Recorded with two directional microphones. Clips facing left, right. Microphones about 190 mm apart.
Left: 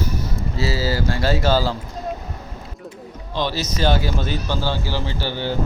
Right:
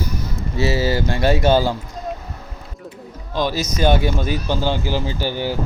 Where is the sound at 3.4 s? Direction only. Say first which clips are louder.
Right 3 dB; 10° right (ahead or behind).